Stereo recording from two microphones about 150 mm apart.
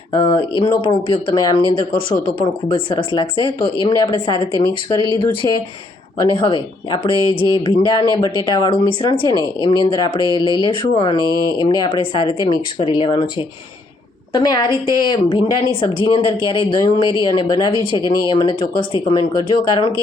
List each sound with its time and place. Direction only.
0.1 s speech: 30° left (ahead or behind)
14.3 s speech: 30° left (ahead or behind)